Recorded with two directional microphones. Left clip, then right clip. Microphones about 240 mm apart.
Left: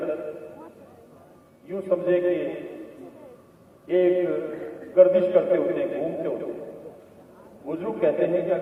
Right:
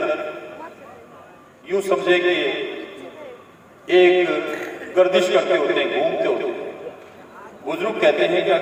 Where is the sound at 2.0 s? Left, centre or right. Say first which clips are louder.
Right 4 dB; centre.